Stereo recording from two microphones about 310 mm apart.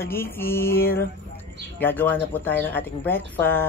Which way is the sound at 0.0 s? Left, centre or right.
Centre.